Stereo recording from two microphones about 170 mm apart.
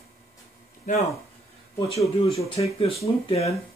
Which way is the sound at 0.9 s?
45° left (ahead or behind).